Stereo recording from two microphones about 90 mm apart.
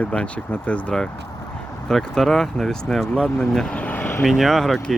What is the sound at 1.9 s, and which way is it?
Speech, 5° left (ahead or behind).